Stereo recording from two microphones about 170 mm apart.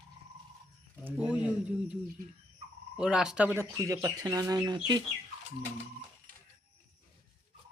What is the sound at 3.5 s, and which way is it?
Speech, 20° right (ahead or behind).